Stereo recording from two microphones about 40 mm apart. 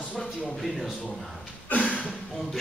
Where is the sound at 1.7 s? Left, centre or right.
Left.